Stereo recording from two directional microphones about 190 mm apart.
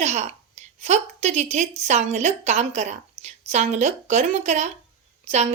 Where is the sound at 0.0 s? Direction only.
35° right (ahead or behind).